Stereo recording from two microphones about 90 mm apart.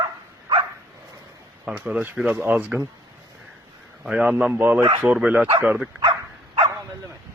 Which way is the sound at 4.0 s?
10° right (ahead or behind).